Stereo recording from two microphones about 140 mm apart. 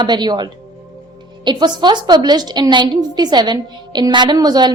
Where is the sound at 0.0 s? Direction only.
30° right (ahead or behind).